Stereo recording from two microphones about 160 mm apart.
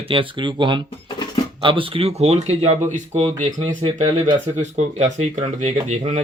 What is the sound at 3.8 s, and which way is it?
Speech, 40° right (ahead or behind).